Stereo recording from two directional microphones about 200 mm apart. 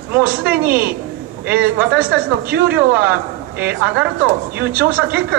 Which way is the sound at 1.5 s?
50° right (ahead or behind).